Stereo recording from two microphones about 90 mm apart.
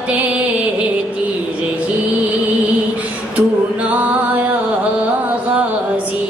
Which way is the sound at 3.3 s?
15° right (ahead or behind).